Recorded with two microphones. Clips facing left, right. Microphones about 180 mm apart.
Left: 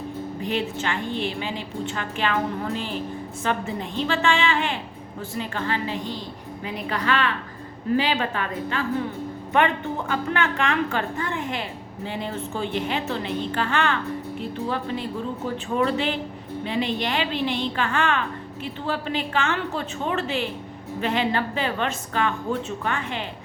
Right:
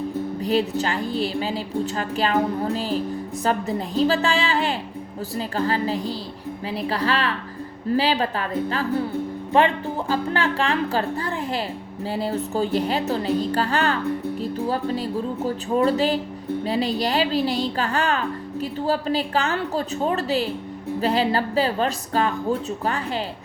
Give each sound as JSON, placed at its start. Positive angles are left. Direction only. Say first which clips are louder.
{"t": 0.4, "sound": "a woman's voice", "louder": "right 4 dB", "side_deg": -35}